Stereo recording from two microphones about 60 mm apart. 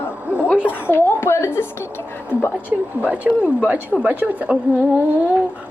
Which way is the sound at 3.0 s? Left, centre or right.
Right.